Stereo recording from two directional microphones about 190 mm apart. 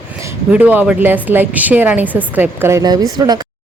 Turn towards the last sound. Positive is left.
turn(degrees=-20)  # may be behind; listen again after turning